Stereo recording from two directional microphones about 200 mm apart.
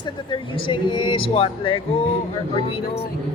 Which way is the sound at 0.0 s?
25° left (ahead or behind).